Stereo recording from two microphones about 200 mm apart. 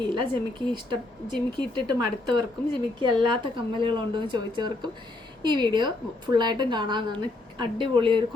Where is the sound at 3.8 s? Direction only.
25° right (ahead or behind).